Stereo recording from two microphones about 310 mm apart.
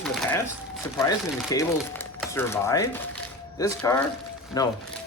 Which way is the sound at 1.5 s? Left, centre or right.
Centre.